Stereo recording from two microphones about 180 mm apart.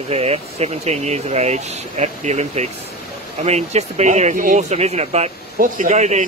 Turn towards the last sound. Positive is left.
turn(degrees=-40)  # may be behind; listen again after turning